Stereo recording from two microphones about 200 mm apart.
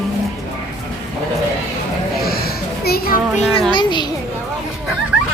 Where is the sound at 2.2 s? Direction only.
50° left (ahead or behind).